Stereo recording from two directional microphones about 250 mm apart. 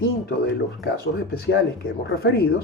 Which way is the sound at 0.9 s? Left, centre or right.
Left.